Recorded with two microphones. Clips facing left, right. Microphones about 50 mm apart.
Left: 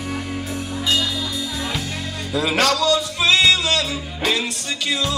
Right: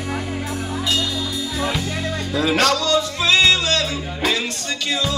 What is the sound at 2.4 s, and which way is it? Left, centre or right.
Music, centre.